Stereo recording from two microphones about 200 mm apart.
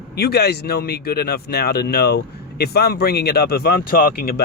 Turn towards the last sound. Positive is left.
turn(degrees=50)  # may be behind; listen again after turning